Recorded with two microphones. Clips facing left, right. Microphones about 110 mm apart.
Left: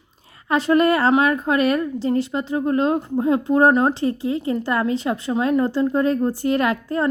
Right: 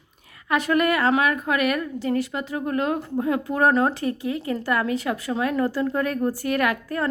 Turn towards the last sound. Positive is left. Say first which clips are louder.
# left 3 dB
turn(degrees=25)  # may be behind; listen again after turning